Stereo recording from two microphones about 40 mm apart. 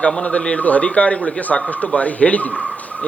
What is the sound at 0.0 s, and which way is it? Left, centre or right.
Speech, left.